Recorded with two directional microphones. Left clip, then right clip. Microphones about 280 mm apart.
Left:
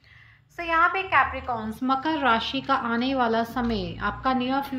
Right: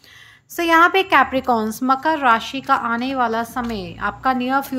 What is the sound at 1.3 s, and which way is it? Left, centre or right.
A woman's voice, centre.